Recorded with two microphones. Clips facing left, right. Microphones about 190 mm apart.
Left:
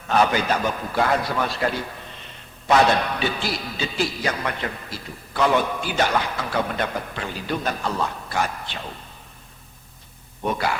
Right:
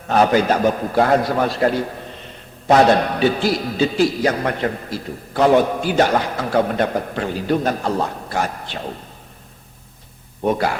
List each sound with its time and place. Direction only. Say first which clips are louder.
0.1 s a man's voice: right 5 dB; 40° right (ahead or behind)
10.4 s a man's voice: right 5 dB; 40° right (ahead or behind)